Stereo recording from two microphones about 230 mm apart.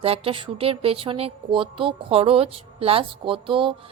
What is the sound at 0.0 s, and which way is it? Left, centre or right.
Speech, right.